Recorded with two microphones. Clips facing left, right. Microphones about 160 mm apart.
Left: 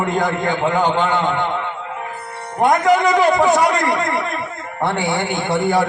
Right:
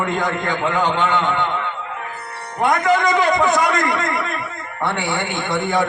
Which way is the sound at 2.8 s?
10° left (ahead or behind).